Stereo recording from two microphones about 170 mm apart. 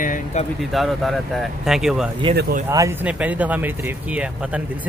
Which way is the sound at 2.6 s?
15° right (ahead or behind).